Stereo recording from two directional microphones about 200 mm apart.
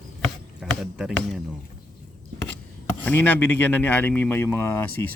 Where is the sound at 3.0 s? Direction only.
10° left (ahead or behind).